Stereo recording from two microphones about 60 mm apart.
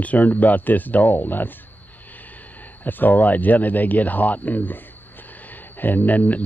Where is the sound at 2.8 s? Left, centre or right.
Left.